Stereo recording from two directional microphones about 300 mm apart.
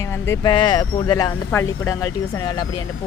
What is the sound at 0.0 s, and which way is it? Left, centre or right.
Speech, centre.